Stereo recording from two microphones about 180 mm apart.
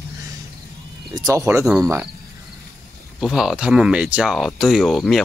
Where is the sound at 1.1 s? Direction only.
20° right (ahead or behind).